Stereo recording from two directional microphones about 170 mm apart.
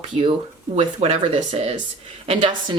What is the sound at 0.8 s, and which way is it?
Speech, 35° right (ahead or behind).